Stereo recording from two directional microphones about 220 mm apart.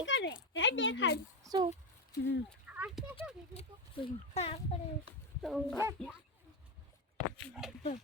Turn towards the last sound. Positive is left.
turn(degrees=0)  # may be behind; listen again after turning